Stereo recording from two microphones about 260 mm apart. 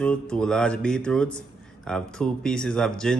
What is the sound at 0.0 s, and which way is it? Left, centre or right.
Speech, centre.